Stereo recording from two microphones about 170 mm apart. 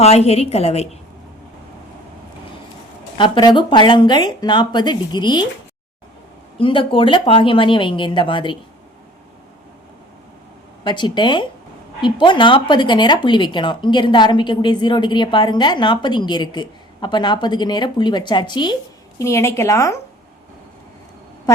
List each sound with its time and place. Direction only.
0.0 s a woman's voice: 35° left (ahead or behind)
3.2 s speech: 30° left (ahead or behind)
6.6 s speech: 30° left (ahead or behind)
10.8 s speech: 25° left (ahead or behind)
19.2 s a woman's voice: 15° left (ahead or behind)